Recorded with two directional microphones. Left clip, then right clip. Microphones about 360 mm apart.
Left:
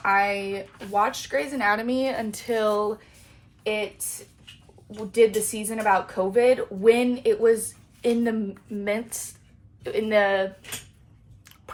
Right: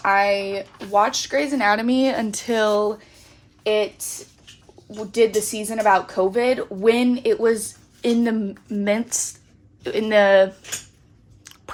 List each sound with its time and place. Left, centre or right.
0.0 s speech: right